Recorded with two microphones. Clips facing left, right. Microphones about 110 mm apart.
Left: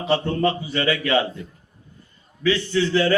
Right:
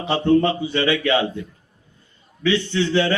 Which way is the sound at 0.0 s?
30° right (ahead or behind).